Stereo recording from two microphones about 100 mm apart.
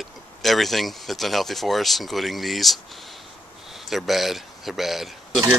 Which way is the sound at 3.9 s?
Centre (ahead or behind).